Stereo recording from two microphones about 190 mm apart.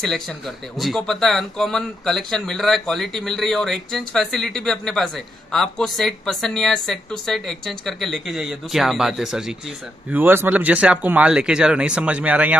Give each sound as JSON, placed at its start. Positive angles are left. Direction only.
{"t": 0.0, "sound": "speech", "side_deg": 0}